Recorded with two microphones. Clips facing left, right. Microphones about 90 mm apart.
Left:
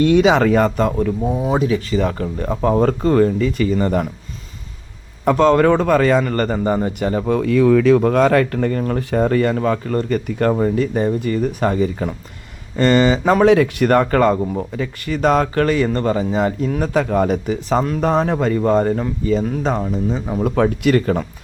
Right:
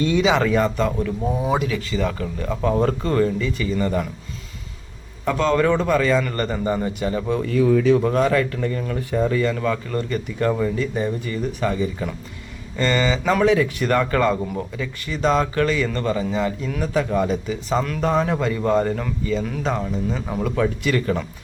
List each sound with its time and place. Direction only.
0.0 s speech: 60° left (ahead or behind)
0.3 s speech: 45° left (ahead or behind)
5.2 s speech: 40° left (ahead or behind)
7.3 s speech: 55° left (ahead or behind); by 7.9 s 85° left
7.9 s speech: 55° left (ahead or behind)
9.0 s speech: 65° left (ahead or behind); by 10.2 s 40° left (ahead or behind)
10.2 s speech: 50° left (ahead or behind)
10.5 s speech: 40° left (ahead or behind)
13.4 s speech: 60° left (ahead or behind)
13.9 s speech: 40° left (ahead or behind)
17.7 s a man's voice: 30° left (ahead or behind)
19.8 s a man's voice: 25° left (ahead or behind)
20.4 s speech: 45° left (ahead or behind)